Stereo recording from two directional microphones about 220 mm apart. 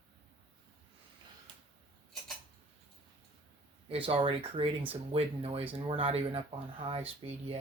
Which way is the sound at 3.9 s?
25° right (ahead or behind).